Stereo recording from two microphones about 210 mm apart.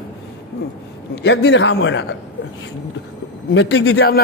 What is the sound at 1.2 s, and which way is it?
Speech, 55° left (ahead or behind).